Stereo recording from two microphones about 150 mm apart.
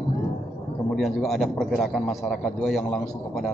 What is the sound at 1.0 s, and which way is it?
A man's voice, centre (ahead or behind).